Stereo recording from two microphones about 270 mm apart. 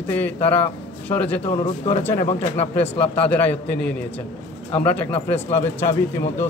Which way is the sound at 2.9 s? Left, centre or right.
Centre.